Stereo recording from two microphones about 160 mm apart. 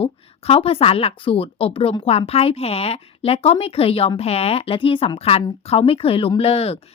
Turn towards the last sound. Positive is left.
turn(degrees=40)  # may be behind; listen again after turning